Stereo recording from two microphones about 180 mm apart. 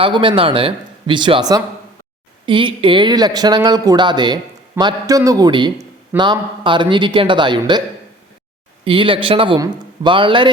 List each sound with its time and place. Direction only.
0.0 s a man's voice: 30° right (ahead or behind)
8.8 s a man's voice: 30° right (ahead or behind)